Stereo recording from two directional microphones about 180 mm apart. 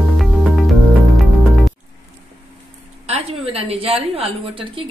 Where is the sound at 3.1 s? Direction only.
35° right (ahead or behind).